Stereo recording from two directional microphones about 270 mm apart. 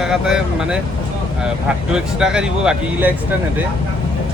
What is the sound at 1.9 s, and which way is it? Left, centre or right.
Speech, centre.